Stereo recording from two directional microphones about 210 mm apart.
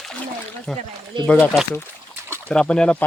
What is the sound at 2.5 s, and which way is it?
Speech, 5° left (ahead or behind).